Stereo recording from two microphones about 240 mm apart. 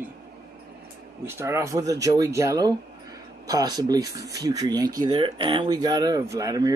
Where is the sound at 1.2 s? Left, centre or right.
Centre.